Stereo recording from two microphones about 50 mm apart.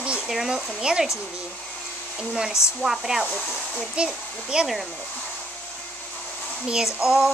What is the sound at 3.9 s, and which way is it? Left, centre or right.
Speech, centre.